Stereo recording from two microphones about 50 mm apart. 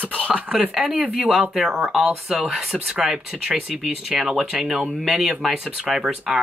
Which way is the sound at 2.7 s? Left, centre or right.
Centre.